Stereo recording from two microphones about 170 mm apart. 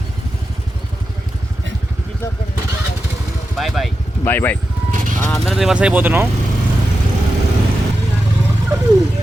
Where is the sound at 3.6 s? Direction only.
Centre (ahead or behind).